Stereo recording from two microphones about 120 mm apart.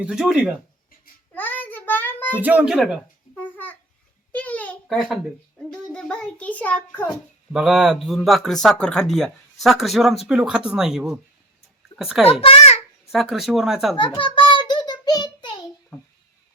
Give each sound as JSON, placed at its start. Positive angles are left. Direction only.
{"t": 0.0, "sound": "speech", "side_deg": -5}
{"t": 1.3, "sound": "child singing", "side_deg": 15}
{"t": 2.3, "sound": "speech", "side_deg": -15}
{"t": 2.6, "sound": "speech", "side_deg": -5}
{"t": 3.3, "sound": "babbling", "side_deg": 15}
{"t": 4.3, "sound": "a sound", "side_deg": 10}
{"t": 4.9, "sound": "speech", "side_deg": -5}
{"t": 5.5, "sound": "a child's voice", "side_deg": 5}
{"t": 7.5, "sound": "a child's voice", "side_deg": -5}
{"t": 12.2, "sound": "a child's voice", "side_deg": 50}
{"t": 13.1, "sound": "speech", "side_deg": 0}
{"t": 13.9, "sound": "a sound", "side_deg": 45}